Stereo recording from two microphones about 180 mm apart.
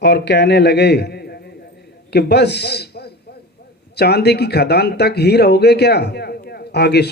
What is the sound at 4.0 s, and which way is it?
A man's voice, 65° left (ahead or behind).